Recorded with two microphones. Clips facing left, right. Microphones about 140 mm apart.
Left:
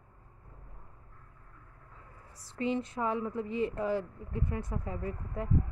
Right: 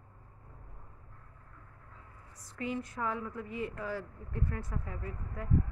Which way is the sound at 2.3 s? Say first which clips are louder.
Left 5 dB; 25° left (ahead or behind).